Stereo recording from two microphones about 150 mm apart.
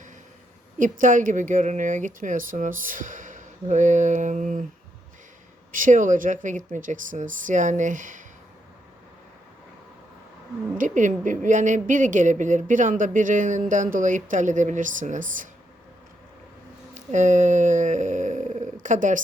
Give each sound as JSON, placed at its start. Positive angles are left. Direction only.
{"t": 0.8, "sound": "a woman's voice", "side_deg": -60}
{"t": 5.7, "sound": "a woman's voice", "side_deg": -60}
{"t": 10.8, "sound": "a woman's voice", "side_deg": -55}
{"t": 16.9, "sound": "a woman's voice", "side_deg": -55}